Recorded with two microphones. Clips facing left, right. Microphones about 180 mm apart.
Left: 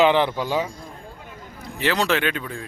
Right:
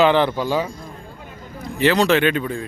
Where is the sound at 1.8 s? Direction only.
5° left (ahead or behind).